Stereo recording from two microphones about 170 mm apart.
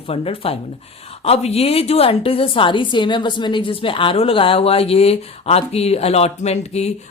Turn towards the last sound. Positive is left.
turn(degrees=40)  # may be behind; listen again after turning